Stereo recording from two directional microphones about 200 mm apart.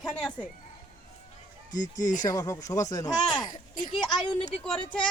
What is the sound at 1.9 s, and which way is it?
Speech, 40° left (ahead or behind).